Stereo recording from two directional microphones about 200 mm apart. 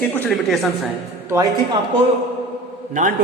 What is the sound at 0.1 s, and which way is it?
Speech, centre (ahead or behind).